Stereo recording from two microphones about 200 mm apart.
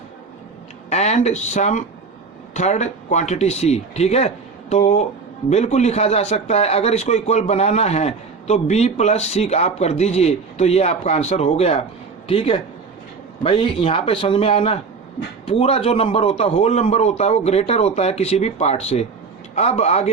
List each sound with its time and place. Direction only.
0.9 s a man's voice: 35° left (ahead or behind)
5.5 s a man's voice: 35° left (ahead or behind)